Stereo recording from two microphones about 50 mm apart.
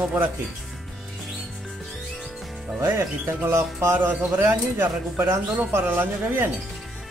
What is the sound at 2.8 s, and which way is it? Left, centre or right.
Speech, right.